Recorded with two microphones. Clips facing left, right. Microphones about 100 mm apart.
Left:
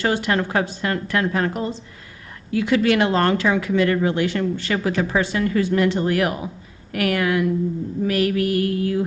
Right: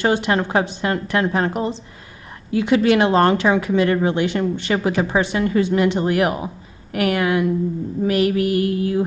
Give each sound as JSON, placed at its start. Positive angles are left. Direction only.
{"t": 0.0, "sound": "speech", "side_deg": -20}